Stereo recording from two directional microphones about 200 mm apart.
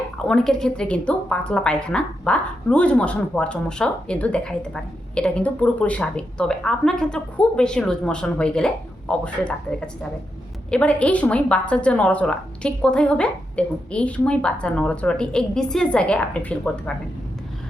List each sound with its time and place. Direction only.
0.3 s a woman's voice: 5° left (ahead or behind)